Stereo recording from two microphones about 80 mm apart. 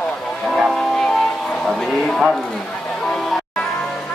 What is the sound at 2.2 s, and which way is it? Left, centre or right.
Speech, centre.